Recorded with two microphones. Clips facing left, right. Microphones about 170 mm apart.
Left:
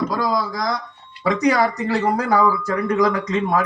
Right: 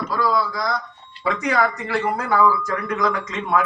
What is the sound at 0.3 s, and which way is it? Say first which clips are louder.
A man's voice: even; 45° left (ahead or behind).